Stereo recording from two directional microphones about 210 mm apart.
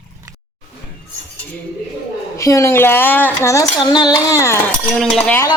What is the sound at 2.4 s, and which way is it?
Speech, 15° left (ahead or behind).